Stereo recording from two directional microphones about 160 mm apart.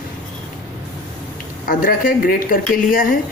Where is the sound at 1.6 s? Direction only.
65° left (ahead or behind).